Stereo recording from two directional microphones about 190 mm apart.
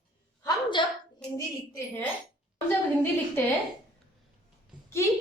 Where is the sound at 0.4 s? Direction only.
25° left (ahead or behind).